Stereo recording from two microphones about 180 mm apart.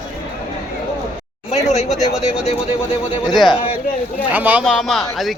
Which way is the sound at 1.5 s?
40° left (ahead or behind).